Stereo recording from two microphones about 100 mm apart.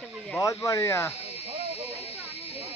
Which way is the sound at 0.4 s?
30° left (ahead or behind).